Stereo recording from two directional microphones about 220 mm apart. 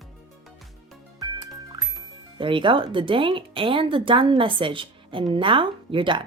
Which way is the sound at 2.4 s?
20° right (ahead or behind).